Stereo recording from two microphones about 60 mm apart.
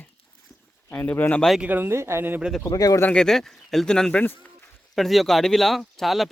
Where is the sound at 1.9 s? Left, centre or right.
Right.